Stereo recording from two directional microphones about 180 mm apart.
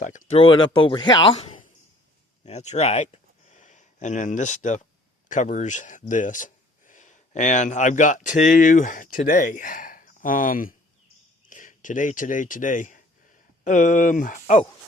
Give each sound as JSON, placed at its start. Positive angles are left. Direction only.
{"t": 0.0, "sound": "speech", "side_deg": 45}
{"t": 0.3, "sound": "speech", "side_deg": 30}